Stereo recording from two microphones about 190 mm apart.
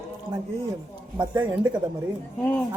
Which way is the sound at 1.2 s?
25° right (ahead or behind).